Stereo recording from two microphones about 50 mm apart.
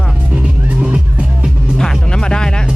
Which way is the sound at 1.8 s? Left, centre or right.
Centre.